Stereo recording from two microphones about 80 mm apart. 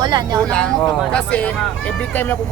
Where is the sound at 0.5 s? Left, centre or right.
Centre.